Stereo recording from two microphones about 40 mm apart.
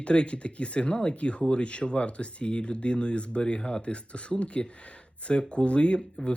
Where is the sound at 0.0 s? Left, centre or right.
Left.